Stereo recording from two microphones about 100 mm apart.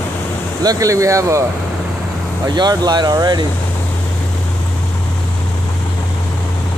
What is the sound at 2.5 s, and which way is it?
Speech, 45° right (ahead or behind).